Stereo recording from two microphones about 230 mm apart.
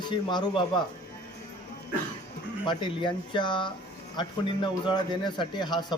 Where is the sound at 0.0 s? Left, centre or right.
Centre.